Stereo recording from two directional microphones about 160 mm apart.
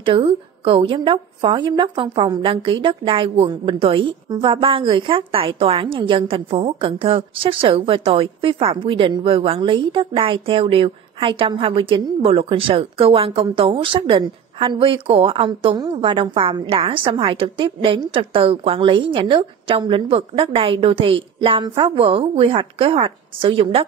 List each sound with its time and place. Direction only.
0.0 s a woman's voice: 35° right (ahead or behind)